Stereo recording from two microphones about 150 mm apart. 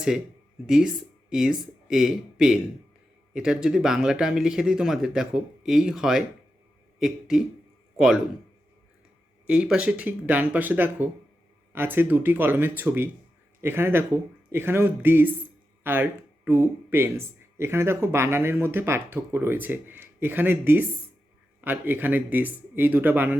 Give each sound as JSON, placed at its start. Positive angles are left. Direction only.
{"t": 1.3, "sound": "a man's voice", "side_deg": -5}
{"t": 9.5, "sound": "speech", "side_deg": -5}